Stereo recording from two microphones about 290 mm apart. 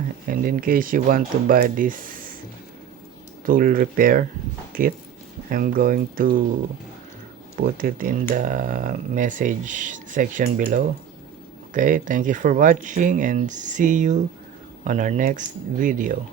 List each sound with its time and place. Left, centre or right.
0.3 s speech: right
3.4 s speech: right
7.5 s speech: right